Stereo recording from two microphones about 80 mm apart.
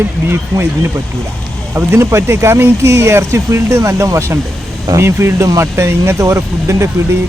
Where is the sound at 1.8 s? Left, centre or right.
Right.